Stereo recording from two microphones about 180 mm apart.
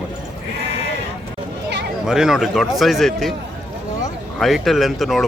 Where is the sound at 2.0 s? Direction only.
5° right (ahead or behind).